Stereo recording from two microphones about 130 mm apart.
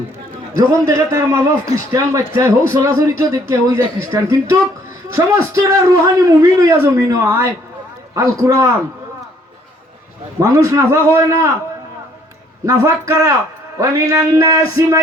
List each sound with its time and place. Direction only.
0.5 s a man's voice: 25° right (ahead or behind)
10.4 s a man's voice: 25° right (ahead or behind)
12.6 s a man's voice: 25° right (ahead or behind)